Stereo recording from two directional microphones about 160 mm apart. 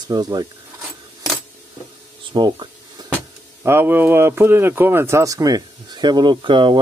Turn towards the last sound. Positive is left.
turn(degrees=-30)  # may be behind; listen again after turning